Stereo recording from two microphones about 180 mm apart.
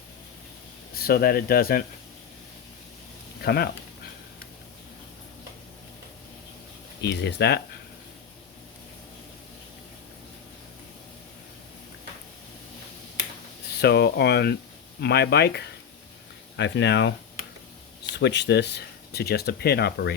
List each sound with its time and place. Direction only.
0.9 s speech: 55° left (ahead or behind)
3.4 s speech: 60° left (ahead or behind)
7.0 s speech: 70° left (ahead or behind)
13.8 s speech: 65° left (ahead or behind)
16.6 s speech: 80° left